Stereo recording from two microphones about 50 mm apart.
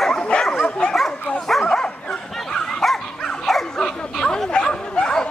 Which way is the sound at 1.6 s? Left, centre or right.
Centre.